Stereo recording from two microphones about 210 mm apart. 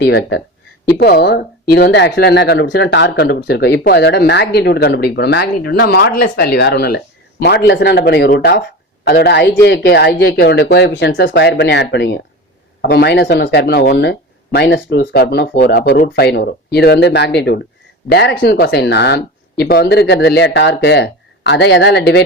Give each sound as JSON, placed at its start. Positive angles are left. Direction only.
{"t": 0.0, "sound": "speech", "side_deg": 55}